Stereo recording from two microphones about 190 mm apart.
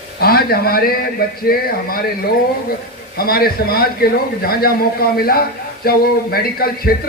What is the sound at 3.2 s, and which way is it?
A man's voice, 50° left (ahead or behind).